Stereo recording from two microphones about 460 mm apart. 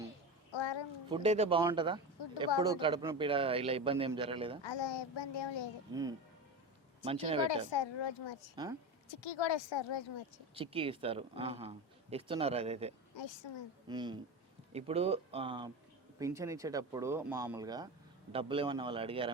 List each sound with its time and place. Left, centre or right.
0.5 s a sound: left
1.1 s speech: centre
4.6 s a child's voice: left
5.9 s speech: centre
7.7 s a child's voice: left
8.6 s speech: centre
9.0 s a child's voice: left
10.5 s speech: centre
13.1 s a child's voice: left
13.8 s speech: centre